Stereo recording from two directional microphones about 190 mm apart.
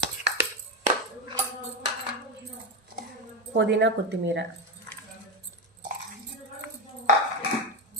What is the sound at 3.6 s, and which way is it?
Speech, 70° right (ahead or behind).